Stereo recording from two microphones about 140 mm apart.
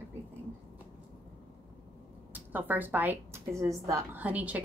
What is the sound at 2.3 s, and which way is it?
A woman's voice, 15° right (ahead or behind).